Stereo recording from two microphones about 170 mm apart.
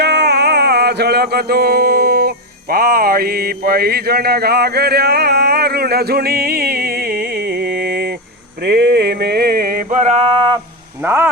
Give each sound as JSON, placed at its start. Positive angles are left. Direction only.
{"t": 0.0, "sound": "music", "side_deg": -80}
{"t": 8.6, "sound": "a sound", "side_deg": -75}
{"t": 11.0, "sound": "speech", "side_deg": -15}